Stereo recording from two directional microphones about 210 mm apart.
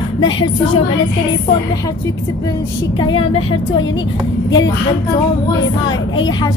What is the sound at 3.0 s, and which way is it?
Speech, 20° left (ahead or behind).